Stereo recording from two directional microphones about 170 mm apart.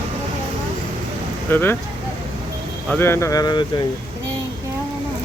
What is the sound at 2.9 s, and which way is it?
Speech, 15° left (ahead or behind).